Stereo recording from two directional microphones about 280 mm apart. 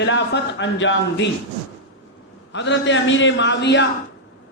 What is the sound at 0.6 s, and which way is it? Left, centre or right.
Speech, left.